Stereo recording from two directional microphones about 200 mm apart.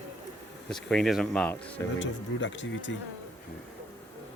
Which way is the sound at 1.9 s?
65° left (ahead or behind).